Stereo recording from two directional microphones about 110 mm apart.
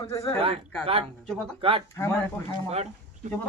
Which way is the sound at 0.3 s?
60° right (ahead or behind).